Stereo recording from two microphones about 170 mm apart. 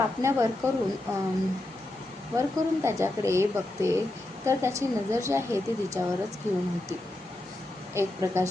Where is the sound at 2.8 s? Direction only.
15° right (ahead or behind).